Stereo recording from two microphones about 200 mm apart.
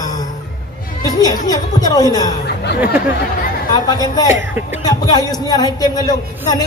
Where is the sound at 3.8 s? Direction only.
20° left (ahead or behind).